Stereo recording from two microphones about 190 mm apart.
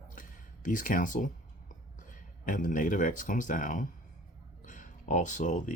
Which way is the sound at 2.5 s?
45° left (ahead or behind).